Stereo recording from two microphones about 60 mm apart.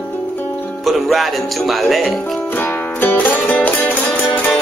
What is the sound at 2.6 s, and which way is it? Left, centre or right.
Music, left.